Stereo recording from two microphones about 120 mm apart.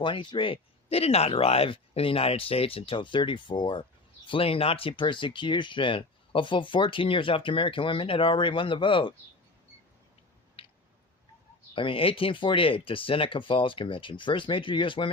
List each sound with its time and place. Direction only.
0.0 s speech: 45° left (ahead or behind)
10.6 s a sound: 50° left (ahead or behind)
11.7 s speech: 45° left (ahead or behind)